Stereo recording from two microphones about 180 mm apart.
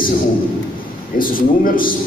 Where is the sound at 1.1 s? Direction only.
50° left (ahead or behind).